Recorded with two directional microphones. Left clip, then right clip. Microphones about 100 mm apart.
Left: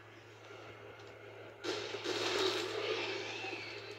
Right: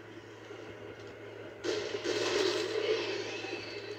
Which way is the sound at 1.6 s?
50° left (ahead or behind).